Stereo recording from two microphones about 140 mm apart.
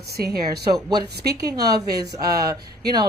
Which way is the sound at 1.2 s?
25° right (ahead or behind).